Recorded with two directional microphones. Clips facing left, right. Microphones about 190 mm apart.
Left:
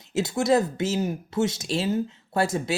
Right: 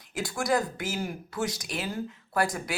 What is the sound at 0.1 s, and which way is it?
Speech, 25° left (ahead or behind).